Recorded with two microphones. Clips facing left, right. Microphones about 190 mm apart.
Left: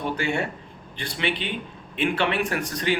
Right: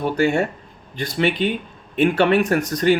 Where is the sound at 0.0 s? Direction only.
45° right (ahead or behind).